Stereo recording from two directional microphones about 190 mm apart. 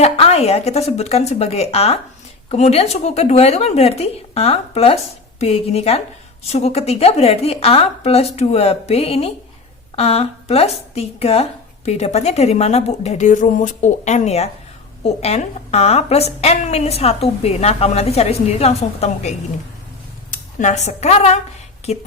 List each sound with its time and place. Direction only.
0.0 s a woman's voice: 30° left (ahead or behind)
20.3 s speech: 40° left (ahead or behind)